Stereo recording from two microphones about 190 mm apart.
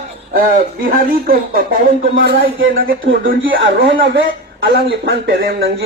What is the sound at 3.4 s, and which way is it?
Speech, 90° right.